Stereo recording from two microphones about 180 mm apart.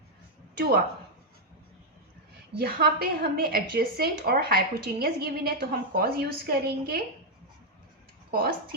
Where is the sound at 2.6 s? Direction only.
55° right (ahead or behind).